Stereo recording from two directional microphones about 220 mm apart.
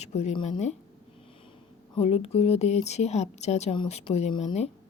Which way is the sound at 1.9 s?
25° left (ahead or behind).